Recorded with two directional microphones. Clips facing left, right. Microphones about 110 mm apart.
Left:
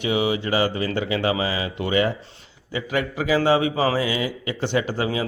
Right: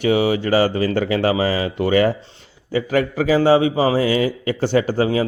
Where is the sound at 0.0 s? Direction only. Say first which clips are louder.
Right 5 dB; 40° right (ahead or behind).